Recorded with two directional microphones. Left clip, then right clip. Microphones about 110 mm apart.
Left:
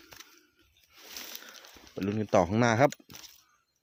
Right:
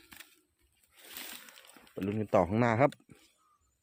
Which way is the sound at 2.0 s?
40° left (ahead or behind).